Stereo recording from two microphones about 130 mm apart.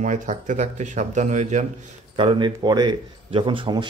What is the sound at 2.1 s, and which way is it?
A man's voice, 40° right (ahead or behind).